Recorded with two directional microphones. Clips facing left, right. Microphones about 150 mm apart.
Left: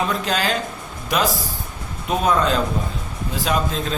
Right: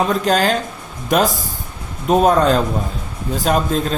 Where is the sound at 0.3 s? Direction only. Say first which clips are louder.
Right 7 dB; 45° right (ahead or behind).